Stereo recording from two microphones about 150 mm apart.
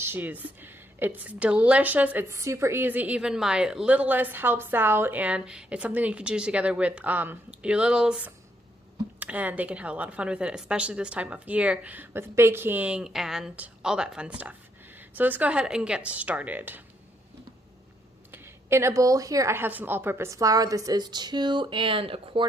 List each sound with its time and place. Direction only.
0.0 s speech: 10° right (ahead or behind)
18.3 s a woman's voice: 15° right (ahead or behind); by 22.4 s 40° right (ahead or behind)